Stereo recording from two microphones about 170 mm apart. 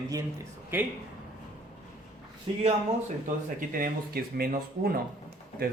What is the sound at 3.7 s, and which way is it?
Speech, 60° right (ahead or behind).